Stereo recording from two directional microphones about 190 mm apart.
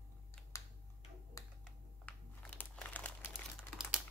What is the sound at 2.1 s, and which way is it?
Crumpling, 10° left (ahead or behind).